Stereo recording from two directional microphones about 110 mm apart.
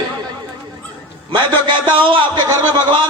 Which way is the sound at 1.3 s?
45° right (ahead or behind).